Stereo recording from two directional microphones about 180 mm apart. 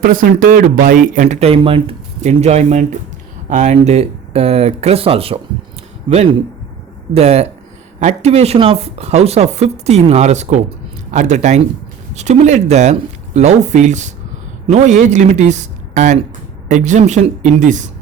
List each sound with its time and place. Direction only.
0.0 s speech: 50° right (ahead or behind); by 5.4 s 30° right (ahead or behind)
7.1 s speech: 35° right (ahead or behind)